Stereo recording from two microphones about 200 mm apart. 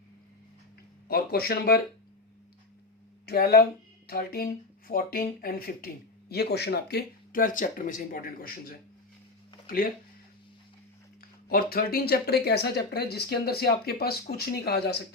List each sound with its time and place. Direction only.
1.0 s speech: 50° left (ahead or behind)
3.2 s speech: 50° left (ahead or behind)
11.4 s speech: 50° left (ahead or behind)